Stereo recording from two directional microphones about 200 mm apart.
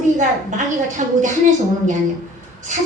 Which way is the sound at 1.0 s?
35° right (ahead or behind).